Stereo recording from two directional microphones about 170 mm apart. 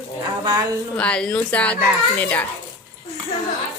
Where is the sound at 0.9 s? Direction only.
5° left (ahead or behind).